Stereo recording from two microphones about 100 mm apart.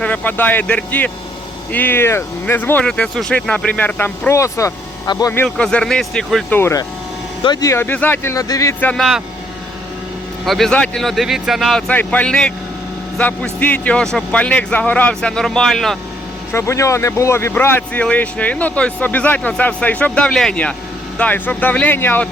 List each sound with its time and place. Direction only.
0.0 s speech: 15° left (ahead or behind)
4.3 s speech: 30° left (ahead or behind)
5.1 s speech: 50° left (ahead or behind)
5.5 s speech: 10° left (ahead or behind)
6.5 s speech: 20° left (ahead or behind)
7.4 s speech: 45° left (ahead or behind)
7.7 s speech: 20° left (ahead or behind); by 8.7 s 35° left (ahead or behind)
9.0 s speech: 5° right (ahead or behind)
10.4 s speech: centre (ahead or behind)
16.5 s speech: 25° left (ahead or behind)